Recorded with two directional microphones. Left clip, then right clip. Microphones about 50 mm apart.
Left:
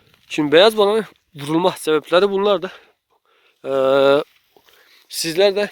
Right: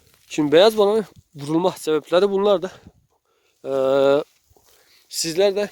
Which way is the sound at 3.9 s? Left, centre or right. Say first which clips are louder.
Left 3 dB; right.